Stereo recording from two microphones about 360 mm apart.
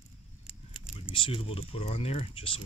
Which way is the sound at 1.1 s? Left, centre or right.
Centre.